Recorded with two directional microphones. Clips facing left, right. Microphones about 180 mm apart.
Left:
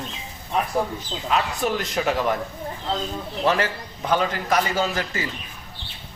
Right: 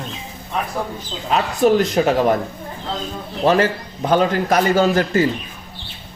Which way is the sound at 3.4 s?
40° right (ahead or behind).